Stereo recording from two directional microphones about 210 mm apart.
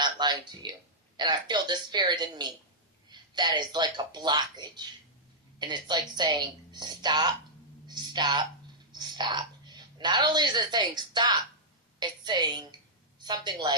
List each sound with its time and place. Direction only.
0.0 s speech: 20° right (ahead or behind)
7.9 s a sound: 20° right (ahead or behind)
8.9 s a woman's voice: 20° right (ahead or behind)